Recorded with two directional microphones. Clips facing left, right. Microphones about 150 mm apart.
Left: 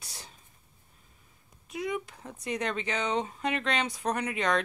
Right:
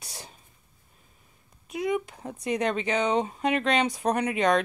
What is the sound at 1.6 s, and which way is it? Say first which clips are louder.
Speech: right 5 dB; 15° right (ahead or behind).